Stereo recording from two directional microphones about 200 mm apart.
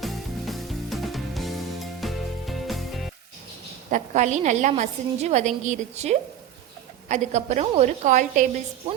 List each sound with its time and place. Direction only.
0.0 s music: centre (ahead or behind)
3.9 s a woman's voice: 35° right (ahead or behind)